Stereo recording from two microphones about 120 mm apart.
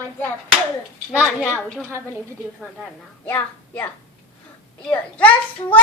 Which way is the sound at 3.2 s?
15° left (ahead or behind).